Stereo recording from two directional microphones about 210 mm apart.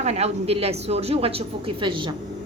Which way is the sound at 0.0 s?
30° right (ahead or behind).